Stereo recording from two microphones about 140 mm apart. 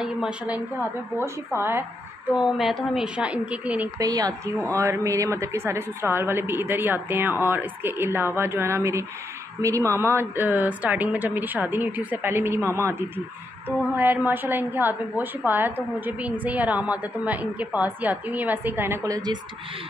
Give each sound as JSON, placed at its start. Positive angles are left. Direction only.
{"t": 0.0, "sound": "a woman's voice", "side_deg": -5}
{"t": 1.1, "sound": "a woman's voice", "side_deg": -20}
{"t": 2.5, "sound": "a woman's voice", "side_deg": 0}
{"t": 4.0, "sound": "a woman's voice", "side_deg": -25}
{"t": 4.3, "sound": "speech", "side_deg": 10}
{"t": 4.7, "sound": "a woman's voice", "side_deg": -20}
{"t": 13.9, "sound": "a woman's voice", "side_deg": -15}